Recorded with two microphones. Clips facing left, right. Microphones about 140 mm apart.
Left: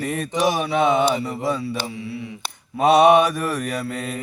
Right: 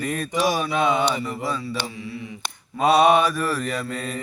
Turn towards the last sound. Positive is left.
turn(degrees=20)  # may be behind; listen again after turning